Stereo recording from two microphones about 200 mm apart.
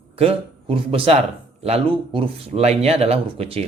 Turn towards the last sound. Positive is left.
turn(degrees=-30)  # may be behind; listen again after turning